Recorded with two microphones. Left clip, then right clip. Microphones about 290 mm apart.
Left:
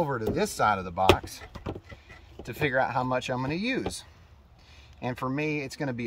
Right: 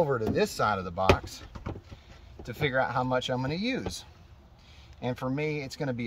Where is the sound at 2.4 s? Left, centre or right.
Centre.